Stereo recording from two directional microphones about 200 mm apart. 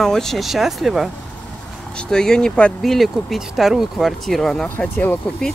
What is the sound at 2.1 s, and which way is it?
Speech, 5° left (ahead or behind).